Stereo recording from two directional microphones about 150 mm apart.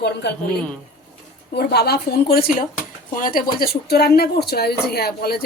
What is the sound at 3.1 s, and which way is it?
Speech, 70° left (ahead or behind).